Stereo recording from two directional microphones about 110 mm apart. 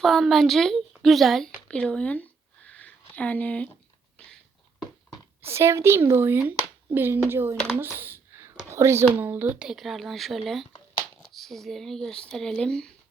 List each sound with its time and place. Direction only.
0.0 s speech: centre (ahead or behind)
2.6 s a sound: 15° left (ahead or behind)
5.4 s a woman's voice: 25° right (ahead or behind)
7.5 s speech: 10° left (ahead or behind)
7.9 s a sound: 20° right (ahead or behind)
8.7 s speech: 25° right (ahead or behind); by 12.9 s 5° left (ahead or behind)